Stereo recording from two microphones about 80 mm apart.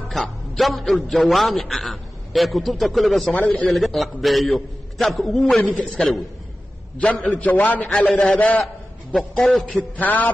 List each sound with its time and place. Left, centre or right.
0.1 s a man's voice: centre
7.0 s a man's voice: centre
9.3 s a man's voice: centre
9.7 s a man's voice: left